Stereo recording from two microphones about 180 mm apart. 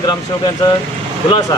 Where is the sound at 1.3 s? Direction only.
20° left (ahead or behind).